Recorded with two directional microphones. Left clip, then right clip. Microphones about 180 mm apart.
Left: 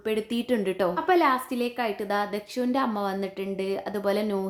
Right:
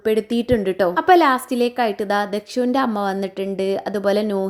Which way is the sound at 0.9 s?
40° right (ahead or behind).